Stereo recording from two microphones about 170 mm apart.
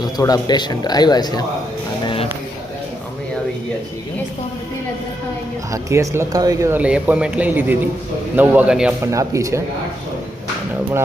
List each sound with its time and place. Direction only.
0.0 s speech: 25° left (ahead or behind)
5.7 s speech: 15° right (ahead or behind)
9.0 s speech: 20° right (ahead or behind)